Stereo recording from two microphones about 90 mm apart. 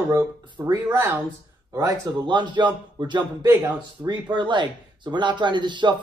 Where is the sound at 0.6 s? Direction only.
40° right (ahead or behind).